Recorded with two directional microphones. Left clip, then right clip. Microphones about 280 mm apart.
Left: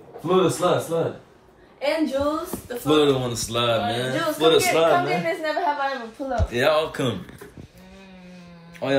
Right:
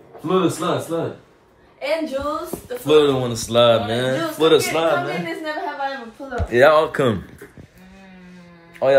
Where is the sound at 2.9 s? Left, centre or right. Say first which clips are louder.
Right 4 dB; centre.